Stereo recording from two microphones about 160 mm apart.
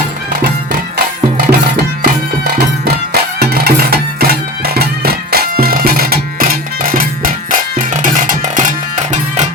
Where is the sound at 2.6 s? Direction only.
75° right (ahead or behind).